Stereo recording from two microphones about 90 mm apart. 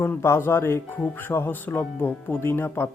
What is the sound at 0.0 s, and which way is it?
Speech, 30° left (ahead or behind).